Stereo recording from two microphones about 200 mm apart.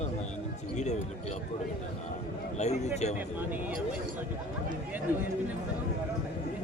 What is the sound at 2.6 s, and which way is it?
Speech, 35° left (ahead or behind).